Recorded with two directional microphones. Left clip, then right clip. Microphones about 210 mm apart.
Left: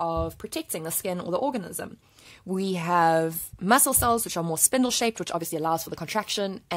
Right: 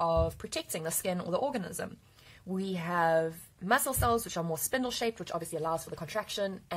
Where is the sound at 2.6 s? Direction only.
45° left (ahead or behind).